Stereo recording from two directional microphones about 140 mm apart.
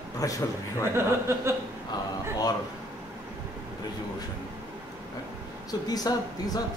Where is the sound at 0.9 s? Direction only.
20° right (ahead or behind).